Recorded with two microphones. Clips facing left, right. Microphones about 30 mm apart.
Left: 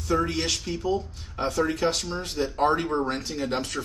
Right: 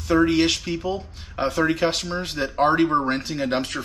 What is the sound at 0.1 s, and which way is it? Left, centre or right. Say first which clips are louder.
Speech: right 7 dB; right.